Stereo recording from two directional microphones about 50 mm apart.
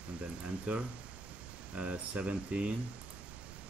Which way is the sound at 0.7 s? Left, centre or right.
Right.